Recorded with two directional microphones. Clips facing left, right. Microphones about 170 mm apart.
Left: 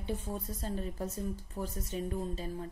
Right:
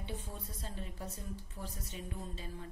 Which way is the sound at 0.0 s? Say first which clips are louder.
Left 7 dB; 45° left (ahead or behind).